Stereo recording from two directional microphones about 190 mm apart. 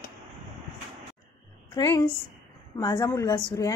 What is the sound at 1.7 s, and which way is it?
A woman's voice, 20° left (ahead or behind).